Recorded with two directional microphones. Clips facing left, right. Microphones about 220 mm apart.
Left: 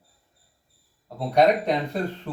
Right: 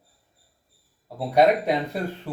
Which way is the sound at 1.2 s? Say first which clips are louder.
Even; 5° right (ahead or behind).